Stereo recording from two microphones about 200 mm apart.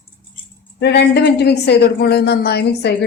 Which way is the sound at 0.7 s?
55° left (ahead or behind).